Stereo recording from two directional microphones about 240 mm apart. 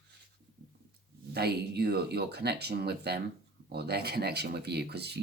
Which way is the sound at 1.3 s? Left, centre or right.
Right.